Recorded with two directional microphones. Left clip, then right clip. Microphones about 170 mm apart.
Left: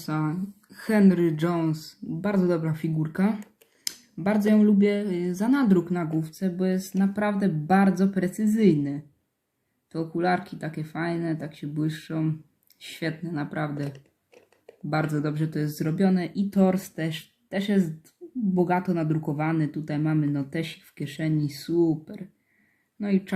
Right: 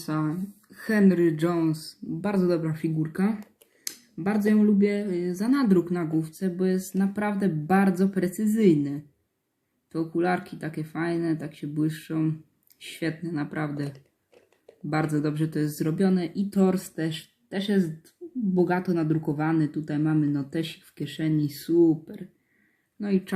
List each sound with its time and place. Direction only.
0.0 s speech: 15° left (ahead or behind)
18.9 s speech: 5° left (ahead or behind)
23.0 s speech: 5° left (ahead or behind)